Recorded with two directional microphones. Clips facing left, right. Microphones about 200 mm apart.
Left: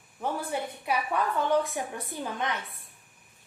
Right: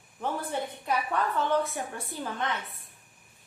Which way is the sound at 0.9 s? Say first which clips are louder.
Left 1 dB; 10° left (ahead or behind).